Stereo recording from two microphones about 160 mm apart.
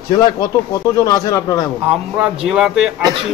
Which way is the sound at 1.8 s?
5° right (ahead or behind).